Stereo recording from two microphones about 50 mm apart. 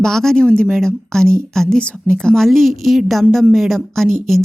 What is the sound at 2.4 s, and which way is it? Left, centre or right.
Speech, centre.